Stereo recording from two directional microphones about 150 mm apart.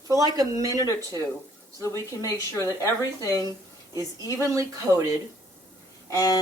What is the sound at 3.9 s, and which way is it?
Speech, 20° right (ahead or behind).